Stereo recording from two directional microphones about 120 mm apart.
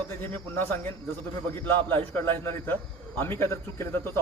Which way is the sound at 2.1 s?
20° left (ahead or behind).